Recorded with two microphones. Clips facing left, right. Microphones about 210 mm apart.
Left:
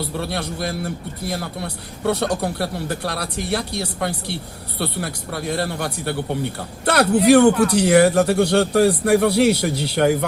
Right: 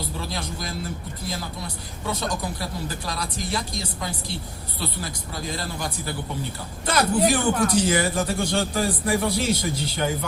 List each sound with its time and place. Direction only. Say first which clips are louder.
0.0 s a man's voice: left 6 dB; 65° left (ahead or behind)